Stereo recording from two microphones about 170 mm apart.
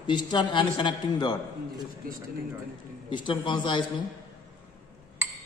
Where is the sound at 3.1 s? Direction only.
30° left (ahead or behind).